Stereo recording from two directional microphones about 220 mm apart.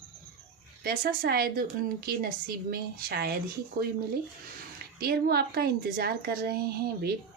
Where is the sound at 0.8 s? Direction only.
40° right (ahead or behind).